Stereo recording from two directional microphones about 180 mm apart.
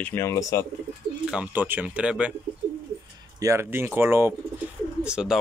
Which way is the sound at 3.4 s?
15° right (ahead or behind).